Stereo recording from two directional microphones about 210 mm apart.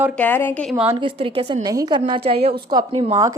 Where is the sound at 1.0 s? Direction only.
25° right (ahead or behind).